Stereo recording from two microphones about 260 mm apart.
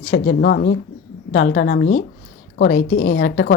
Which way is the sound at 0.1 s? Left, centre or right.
Left.